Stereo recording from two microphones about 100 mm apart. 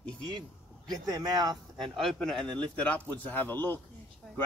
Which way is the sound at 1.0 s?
40° right (ahead or behind).